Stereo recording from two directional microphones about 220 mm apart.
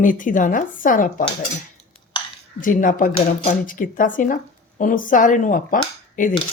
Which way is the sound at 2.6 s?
35° left (ahead or behind).